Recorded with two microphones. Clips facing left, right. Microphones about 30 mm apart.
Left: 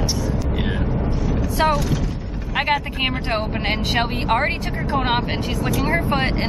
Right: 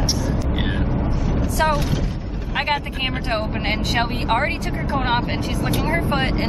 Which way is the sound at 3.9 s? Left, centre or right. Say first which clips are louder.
Left 1 dB; centre.